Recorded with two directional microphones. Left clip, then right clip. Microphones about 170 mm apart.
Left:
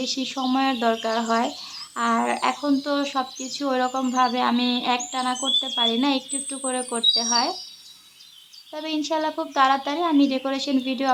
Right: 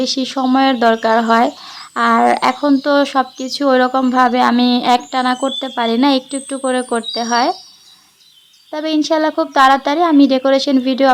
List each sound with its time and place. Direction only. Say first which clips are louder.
0.0 s speech: right 9 dB; 40° right (ahead or behind)
8.7 s speech: right 10 dB; 40° right (ahead or behind)